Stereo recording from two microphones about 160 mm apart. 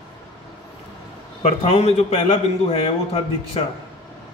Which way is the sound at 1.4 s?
40° left (ahead or behind).